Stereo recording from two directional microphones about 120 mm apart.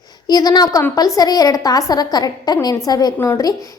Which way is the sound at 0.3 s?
35° left (ahead or behind).